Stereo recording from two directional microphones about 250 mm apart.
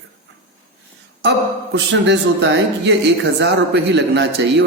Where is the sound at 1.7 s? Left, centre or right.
Right.